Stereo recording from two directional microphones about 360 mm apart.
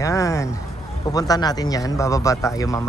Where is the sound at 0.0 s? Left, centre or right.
Centre.